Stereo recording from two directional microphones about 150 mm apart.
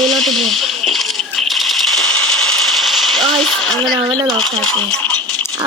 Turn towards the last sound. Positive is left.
turn(degrees=10)  # may be behind; listen again after turning